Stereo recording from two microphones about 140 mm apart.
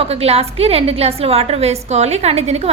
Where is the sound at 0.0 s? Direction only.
45° right (ahead or behind).